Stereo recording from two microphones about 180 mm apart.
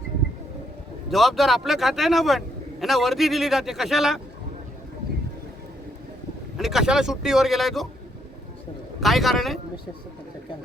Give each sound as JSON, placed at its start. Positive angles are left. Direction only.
{"t": 1.1, "sound": "a man's voice", "side_deg": 0}
{"t": 6.6, "sound": "a man's voice", "side_deg": 0}
{"t": 9.0, "sound": "a man's voice", "side_deg": 0}